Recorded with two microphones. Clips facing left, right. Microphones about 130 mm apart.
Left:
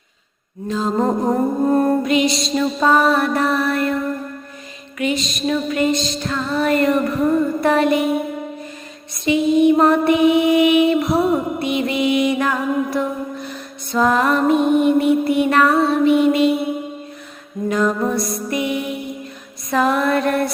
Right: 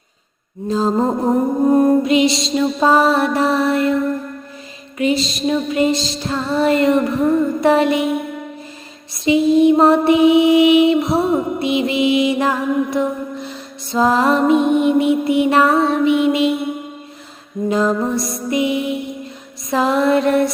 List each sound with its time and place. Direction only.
0.7 s mantra: 35° right (ahead or behind)
0.9 s mantra: 5° right (ahead or behind)
2.0 s mantra: 25° right (ahead or behind)
4.9 s mantra: 30° right (ahead or behind)
9.2 s mantra: 30° right (ahead or behind)
17.7 s mantra: 25° right (ahead or behind)
18.1 s music: centre (ahead or behind)
18.5 s music: 25° right (ahead or behind)
19.7 s mantra: 25° right (ahead or behind)